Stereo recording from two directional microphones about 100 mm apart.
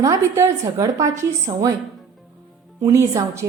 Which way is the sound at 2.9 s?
30° right (ahead or behind).